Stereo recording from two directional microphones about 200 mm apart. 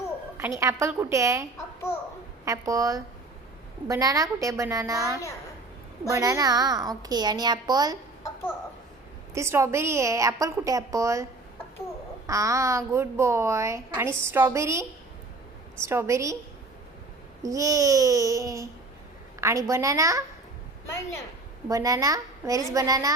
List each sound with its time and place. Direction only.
0.3 s a woman's voice: 15° right (ahead or behind)
9.3 s a woman's voice: 15° right (ahead or behind)
12.3 s a woman's voice: 15° right (ahead or behind)
17.4 s a woman's voice: 15° right (ahead or behind)
21.7 s a woman's voice: 15° right (ahead or behind)